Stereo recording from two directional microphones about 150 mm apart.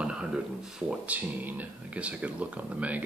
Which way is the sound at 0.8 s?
10° right (ahead or behind).